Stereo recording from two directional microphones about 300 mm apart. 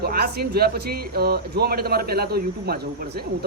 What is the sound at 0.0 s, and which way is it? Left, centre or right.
Speech, right.